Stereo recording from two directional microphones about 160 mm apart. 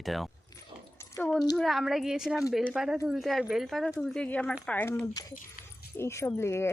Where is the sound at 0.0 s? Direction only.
Centre (ahead or behind).